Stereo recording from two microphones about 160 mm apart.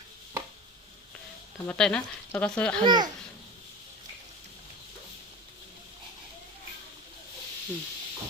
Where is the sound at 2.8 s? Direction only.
25° right (ahead or behind).